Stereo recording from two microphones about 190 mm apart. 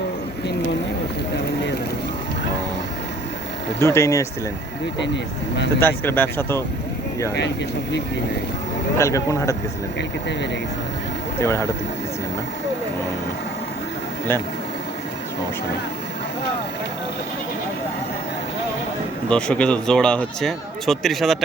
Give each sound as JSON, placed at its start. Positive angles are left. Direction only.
{"t": 3.8, "sound": "speech", "side_deg": 15}
{"t": 4.9, "sound": "speech", "side_deg": 65}
{"t": 5.8, "sound": "speech", "side_deg": 10}
{"t": 9.0, "sound": "speech", "side_deg": 15}
{"t": 11.3, "sound": "speech", "side_deg": 15}
{"t": 19.3, "sound": "speech", "side_deg": 5}